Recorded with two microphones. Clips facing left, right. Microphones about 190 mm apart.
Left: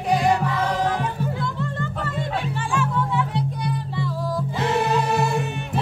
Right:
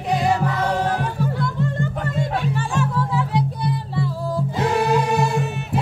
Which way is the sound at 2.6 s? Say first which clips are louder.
Right 1 dB; 35° right (ahead or behind).